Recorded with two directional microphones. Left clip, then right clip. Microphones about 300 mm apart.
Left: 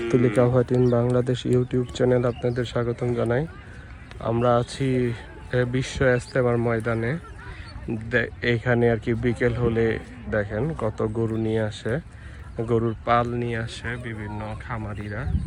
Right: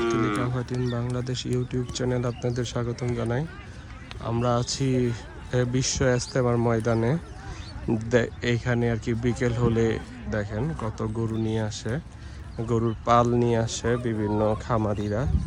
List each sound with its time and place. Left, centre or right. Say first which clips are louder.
0.0 s speech: left 4 dB; right
0.4 s speech: left 10 dB; centre
14.0 s speech: right 6 dB; left
15.0 s speech: right 5 dB; centre